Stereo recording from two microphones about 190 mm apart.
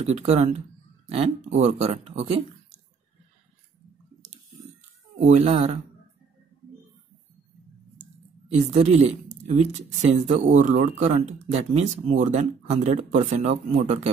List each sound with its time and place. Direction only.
0.0 s speech: 35° right (ahead or behind)
5.2 s speech: 35° right (ahead or behind)
8.5 s speech: 35° right (ahead or behind)